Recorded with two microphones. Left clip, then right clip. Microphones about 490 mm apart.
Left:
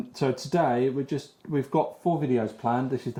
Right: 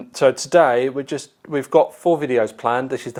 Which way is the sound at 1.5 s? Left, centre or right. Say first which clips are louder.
Right 10 dB; right.